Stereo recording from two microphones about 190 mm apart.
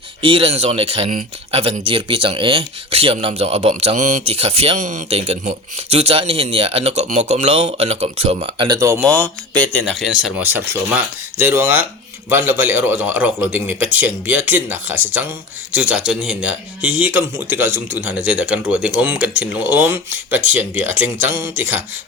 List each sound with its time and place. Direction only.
0.2 s speech: 25° right (ahead or behind)
9.0 s a man's voice: 5° left (ahead or behind)